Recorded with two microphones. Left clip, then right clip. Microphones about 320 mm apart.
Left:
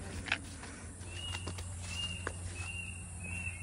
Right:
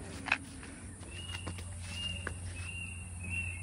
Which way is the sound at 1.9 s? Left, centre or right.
Centre.